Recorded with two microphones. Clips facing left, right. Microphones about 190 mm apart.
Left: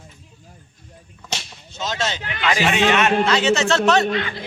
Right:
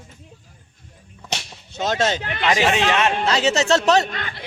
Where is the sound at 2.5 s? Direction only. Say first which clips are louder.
Left 1 dB; 30° right (ahead or behind).